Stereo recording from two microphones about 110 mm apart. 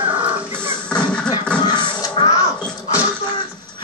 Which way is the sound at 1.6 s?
45° left (ahead or behind).